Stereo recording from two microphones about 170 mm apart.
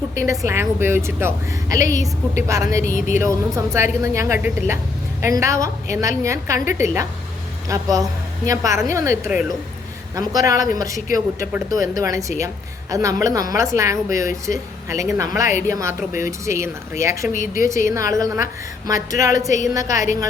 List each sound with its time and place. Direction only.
0.2 s a woman's voice: 15° right (ahead or behind)
17.3 s a woman's voice: 50° left (ahead or behind)
17.9 s a woman's voice: 20° right (ahead or behind)